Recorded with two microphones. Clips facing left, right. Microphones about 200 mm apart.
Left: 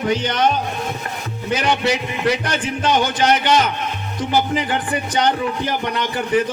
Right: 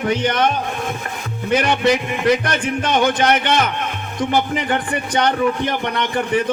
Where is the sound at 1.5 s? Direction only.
55° right (ahead or behind).